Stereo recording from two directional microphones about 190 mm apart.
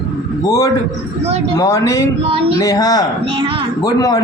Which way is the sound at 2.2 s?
30° right (ahead or behind).